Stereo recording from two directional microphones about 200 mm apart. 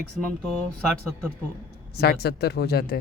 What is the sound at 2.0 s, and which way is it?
Speech, 55° left (ahead or behind).